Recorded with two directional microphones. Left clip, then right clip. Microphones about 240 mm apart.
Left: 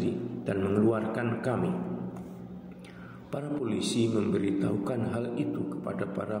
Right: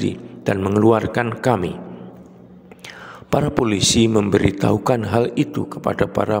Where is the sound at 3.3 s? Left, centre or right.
Right.